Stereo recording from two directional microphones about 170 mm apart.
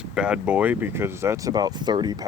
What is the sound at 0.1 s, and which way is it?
Speech, 5° right (ahead or behind).